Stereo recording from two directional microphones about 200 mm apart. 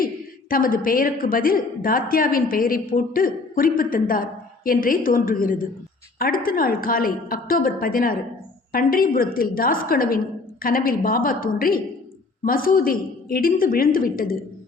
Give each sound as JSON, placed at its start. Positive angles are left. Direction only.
{"t": 0.5, "sound": "a woman's voice", "side_deg": 45}